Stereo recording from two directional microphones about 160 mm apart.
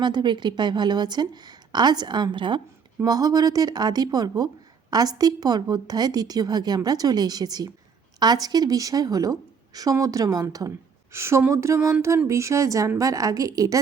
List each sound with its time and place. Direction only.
0.0 s a woman's voice: 25° right (ahead or behind)